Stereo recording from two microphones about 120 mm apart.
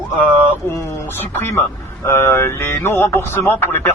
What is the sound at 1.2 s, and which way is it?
Speech, 20° left (ahead or behind).